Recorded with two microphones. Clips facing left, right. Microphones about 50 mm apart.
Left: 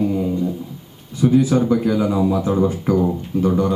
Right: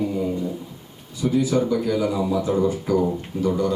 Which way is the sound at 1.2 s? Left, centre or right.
Left.